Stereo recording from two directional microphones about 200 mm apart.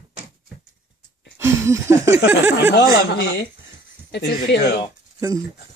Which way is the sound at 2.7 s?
50° left (ahead or behind).